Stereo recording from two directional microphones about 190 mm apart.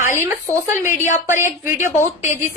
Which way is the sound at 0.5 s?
15° right (ahead or behind).